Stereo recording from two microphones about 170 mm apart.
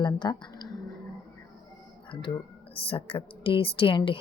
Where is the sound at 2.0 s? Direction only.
30° left (ahead or behind).